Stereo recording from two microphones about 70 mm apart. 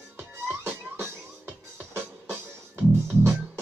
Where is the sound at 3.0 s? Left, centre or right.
Right.